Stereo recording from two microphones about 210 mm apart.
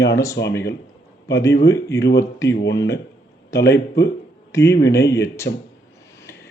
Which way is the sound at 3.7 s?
15° left (ahead or behind).